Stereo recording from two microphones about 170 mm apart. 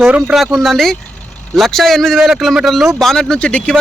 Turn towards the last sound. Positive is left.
turn(degrees=5)  # may be behind; listen again after turning